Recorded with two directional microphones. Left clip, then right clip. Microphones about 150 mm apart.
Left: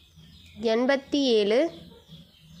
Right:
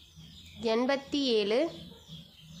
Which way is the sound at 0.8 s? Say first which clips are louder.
Left 6 dB; 20° left (ahead or behind).